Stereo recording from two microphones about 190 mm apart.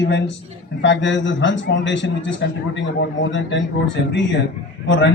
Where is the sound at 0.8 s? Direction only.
70° left (ahead or behind).